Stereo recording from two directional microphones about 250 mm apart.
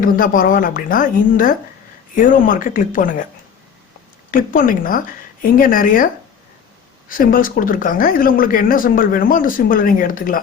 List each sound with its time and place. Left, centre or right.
0.0 s speech: left
4.3 s speech: left
7.1 s speech: left